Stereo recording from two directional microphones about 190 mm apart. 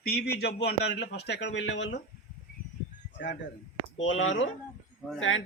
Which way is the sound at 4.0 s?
90° left.